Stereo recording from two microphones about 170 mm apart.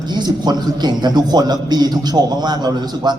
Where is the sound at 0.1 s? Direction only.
25° right (ahead or behind).